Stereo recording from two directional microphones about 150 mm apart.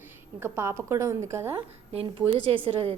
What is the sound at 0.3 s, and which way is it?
A woman's voice, 15° right (ahead or behind).